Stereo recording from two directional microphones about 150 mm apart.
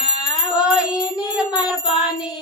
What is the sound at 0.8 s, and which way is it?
Music, 5° right (ahead or behind).